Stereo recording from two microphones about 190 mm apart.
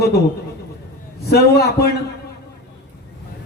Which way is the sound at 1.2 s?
55° left (ahead or behind).